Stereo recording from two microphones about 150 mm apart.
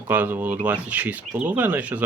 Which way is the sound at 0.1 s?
15° right (ahead or behind).